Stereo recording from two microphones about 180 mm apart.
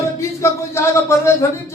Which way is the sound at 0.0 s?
15° left (ahead or behind).